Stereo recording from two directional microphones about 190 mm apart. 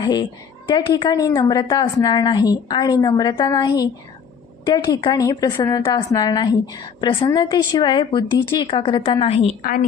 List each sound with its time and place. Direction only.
0.0 s a woman's voice: 20° left (ahead or behind)
9.6 s a woman's voice: 50° left (ahead or behind)